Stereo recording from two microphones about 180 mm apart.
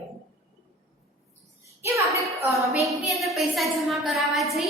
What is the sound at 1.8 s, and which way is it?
Speech, 15° right (ahead or behind).